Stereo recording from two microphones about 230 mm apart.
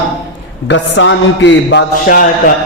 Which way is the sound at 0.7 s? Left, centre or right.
Left.